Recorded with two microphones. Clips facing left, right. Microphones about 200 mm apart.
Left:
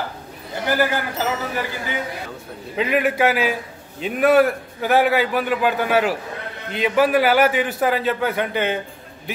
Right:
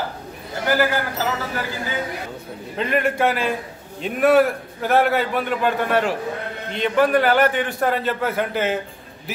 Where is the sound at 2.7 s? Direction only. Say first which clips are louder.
Left 2 dB; 5° left (ahead or behind).